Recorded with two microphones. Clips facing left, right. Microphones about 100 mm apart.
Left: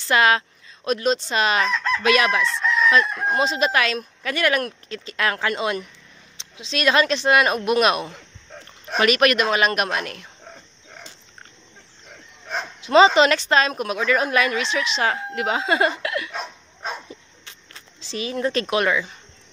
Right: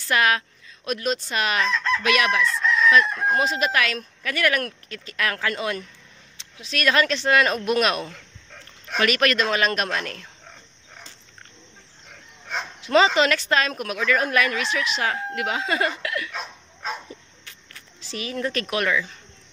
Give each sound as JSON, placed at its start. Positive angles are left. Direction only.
{"t": 0.0, "sound": "a woman's voice", "side_deg": 25}
{"t": 1.7, "sound": "chicken", "side_deg": 20}
{"t": 3.3, "sound": "a woman's voice", "side_deg": 25}
{"t": 12.8, "sound": "a woman's voice", "side_deg": 20}
{"t": 17.1, "sound": "a sound", "side_deg": 25}